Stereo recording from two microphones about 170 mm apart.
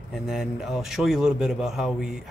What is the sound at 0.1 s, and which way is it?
Speech, centre (ahead or behind).